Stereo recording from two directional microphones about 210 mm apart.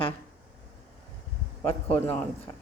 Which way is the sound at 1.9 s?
5° left (ahead or behind).